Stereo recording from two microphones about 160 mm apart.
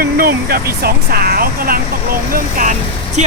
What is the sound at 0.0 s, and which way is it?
Speech, 70° right (ahead or behind).